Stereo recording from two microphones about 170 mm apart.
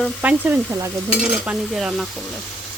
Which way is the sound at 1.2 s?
5° right (ahead or behind).